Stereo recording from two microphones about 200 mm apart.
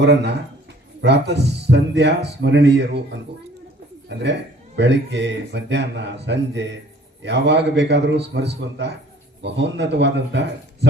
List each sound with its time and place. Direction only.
0.0 s speech: 60° right (ahead or behind)
4.8 s speech: 60° right (ahead or behind)